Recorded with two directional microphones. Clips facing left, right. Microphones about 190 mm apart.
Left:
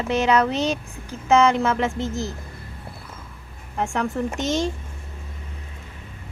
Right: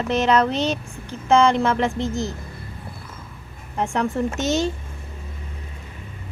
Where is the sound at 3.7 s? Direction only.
Centre (ahead or behind).